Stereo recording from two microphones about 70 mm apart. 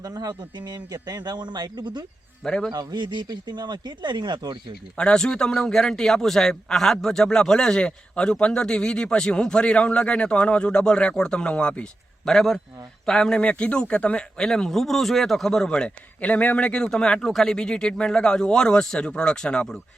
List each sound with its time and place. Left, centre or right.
0.0 s a man's voice: right
2.4 s a man's voice: centre
2.7 s speech: right
4.9 s a man's voice: centre